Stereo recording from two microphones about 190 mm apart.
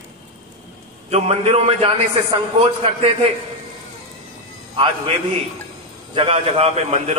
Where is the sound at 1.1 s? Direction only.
35° right (ahead or behind).